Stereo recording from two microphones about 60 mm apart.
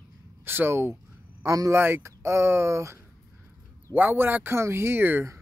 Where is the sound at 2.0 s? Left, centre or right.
Right.